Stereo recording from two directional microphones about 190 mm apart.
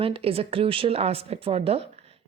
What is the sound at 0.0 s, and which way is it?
A woman's voice, 30° right (ahead or behind).